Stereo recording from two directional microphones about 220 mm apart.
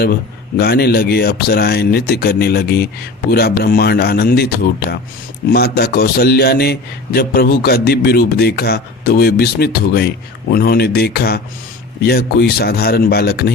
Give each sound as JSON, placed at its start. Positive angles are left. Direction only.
{"t": 0.0, "sound": "a man's voice", "side_deg": 45}